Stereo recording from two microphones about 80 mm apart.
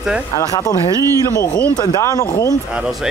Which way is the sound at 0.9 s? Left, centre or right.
Right.